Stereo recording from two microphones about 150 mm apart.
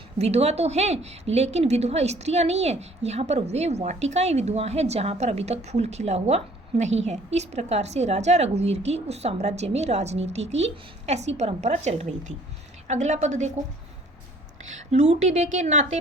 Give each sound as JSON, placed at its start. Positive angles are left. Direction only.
{"t": 0.2, "sound": "a woman's voice", "side_deg": -45}
{"t": 14.6, "sound": "a woman's voice", "side_deg": -50}